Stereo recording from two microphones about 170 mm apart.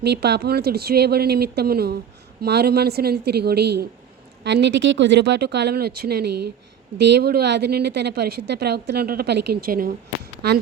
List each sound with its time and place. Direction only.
0.0 s a woman's voice: 80° right
4.4 s speech: 90° right; by 6.3 s 65° right (ahead or behind)
7.0 s a woman's voice: 80° right; by 9.9 s 60° right (ahead or behind)
10.4 s a woman's voice: 70° right (ahead or behind)